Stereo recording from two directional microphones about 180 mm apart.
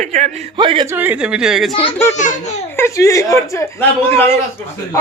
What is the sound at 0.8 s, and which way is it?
Speech, 10° right (ahead or behind).